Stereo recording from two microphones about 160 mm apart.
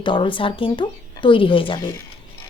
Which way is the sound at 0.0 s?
30° left (ahead or behind).